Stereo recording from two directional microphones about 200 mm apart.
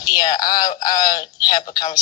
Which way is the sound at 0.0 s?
20° left (ahead or behind).